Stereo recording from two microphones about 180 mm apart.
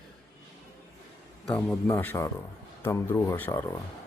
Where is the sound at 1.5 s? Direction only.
5° left (ahead or behind).